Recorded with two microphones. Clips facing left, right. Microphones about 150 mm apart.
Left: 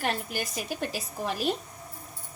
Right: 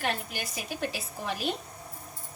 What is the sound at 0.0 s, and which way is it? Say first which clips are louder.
A woman's voice: left 2 dB; 40° left (ahead or behind).